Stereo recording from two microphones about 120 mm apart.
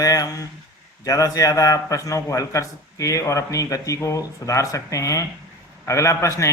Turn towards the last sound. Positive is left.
turn(degrees=25)  # may be behind; listen again after turning